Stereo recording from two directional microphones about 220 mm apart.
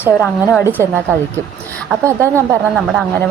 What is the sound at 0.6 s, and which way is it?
A woman's voice, 10° right (ahead or behind).